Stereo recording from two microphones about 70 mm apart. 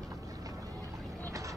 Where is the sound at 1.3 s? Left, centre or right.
Right.